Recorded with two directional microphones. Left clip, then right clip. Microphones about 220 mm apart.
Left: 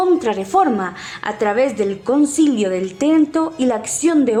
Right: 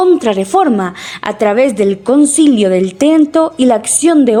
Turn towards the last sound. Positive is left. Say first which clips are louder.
# right 6 dB
turn(degrees=-30)  # may be behind; listen again after turning